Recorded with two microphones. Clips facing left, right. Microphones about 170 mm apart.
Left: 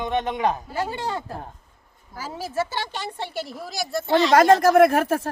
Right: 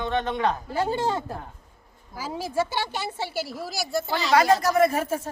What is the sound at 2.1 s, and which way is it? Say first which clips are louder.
A woman's voice: right 1 dB; 10° right (ahead or behind).